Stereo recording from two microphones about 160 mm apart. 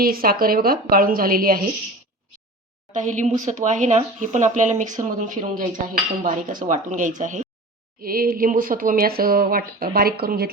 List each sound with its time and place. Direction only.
0.0 s speech: 65° right (ahead or behind)
2.9 s cutlery: 50° right (ahead or behind)
8.0 s speech: 65° right (ahead or behind)